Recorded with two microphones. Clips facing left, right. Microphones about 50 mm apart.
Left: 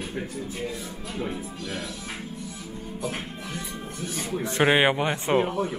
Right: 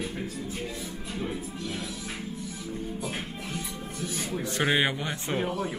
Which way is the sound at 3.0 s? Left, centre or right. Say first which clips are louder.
Left 2 dB; left.